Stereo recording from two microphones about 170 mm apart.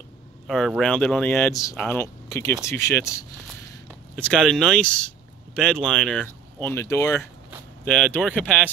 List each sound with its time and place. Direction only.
0.5 s speech: centre (ahead or behind); by 3.8 s 15° left (ahead or behind)
4.1 s speech: 5° left (ahead or behind)
6.7 s speech: 15° left (ahead or behind)